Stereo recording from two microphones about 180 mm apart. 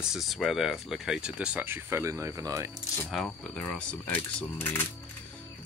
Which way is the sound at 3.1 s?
Centre (ahead or behind).